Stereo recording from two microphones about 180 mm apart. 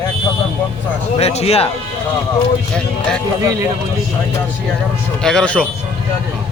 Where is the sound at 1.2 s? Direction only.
35° left (ahead or behind).